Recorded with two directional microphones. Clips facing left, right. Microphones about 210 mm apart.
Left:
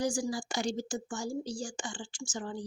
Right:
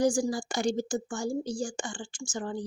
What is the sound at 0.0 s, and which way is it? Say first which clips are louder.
Speech: right 6 dB; 50° right (ahead or behind).